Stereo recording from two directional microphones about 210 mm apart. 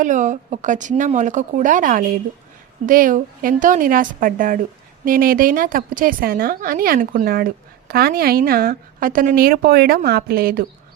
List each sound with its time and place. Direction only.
0.0 s a woman's voice: 35° right (ahead or behind)